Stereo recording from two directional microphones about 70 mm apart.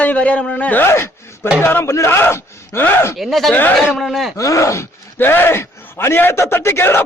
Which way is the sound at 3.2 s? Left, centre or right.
Centre.